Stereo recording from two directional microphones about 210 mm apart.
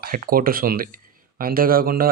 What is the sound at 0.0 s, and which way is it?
Speech, 45° right (ahead or behind).